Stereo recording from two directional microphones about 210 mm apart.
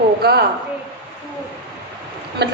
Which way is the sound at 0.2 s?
50° right (ahead or behind).